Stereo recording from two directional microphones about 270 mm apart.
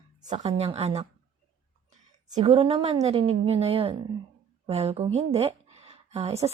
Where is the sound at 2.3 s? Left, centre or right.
Right.